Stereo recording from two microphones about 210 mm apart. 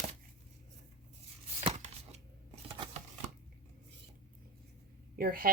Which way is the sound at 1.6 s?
30° right (ahead or behind).